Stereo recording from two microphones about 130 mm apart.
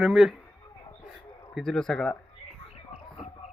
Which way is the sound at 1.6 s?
5° left (ahead or behind).